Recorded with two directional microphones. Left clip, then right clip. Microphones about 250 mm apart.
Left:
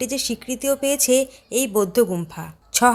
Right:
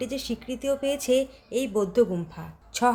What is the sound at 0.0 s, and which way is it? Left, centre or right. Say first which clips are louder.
A woman's voice: left 6 dB; centre.